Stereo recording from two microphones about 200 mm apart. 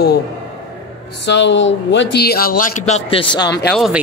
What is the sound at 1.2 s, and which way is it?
A man's voice, 65° left (ahead or behind).